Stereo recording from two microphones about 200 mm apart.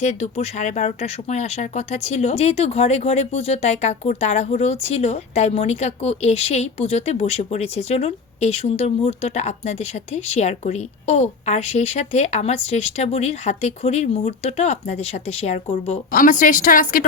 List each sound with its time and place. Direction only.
0.0 s speech: 35° left (ahead or behind)